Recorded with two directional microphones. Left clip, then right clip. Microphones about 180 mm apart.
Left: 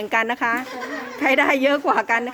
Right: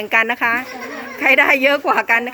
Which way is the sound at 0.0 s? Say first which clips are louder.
Right 5 dB; 10° left (ahead or behind).